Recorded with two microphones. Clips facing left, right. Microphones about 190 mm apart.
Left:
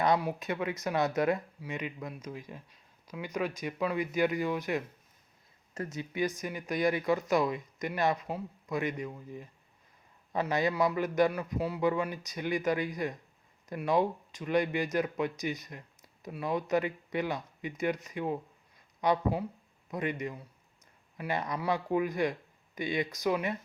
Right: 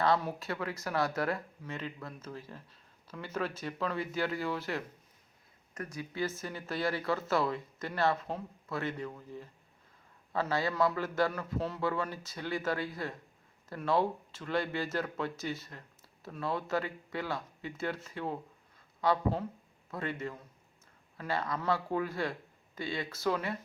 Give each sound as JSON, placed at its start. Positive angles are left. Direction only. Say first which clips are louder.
{"t": 0.0, "sound": "speech", "louder": "left 2 dB", "side_deg": 15}